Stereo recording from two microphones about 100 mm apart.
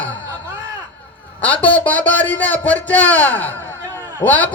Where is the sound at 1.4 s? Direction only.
15° left (ahead or behind).